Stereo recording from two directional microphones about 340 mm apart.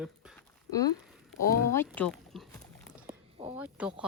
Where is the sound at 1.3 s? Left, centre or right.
Centre.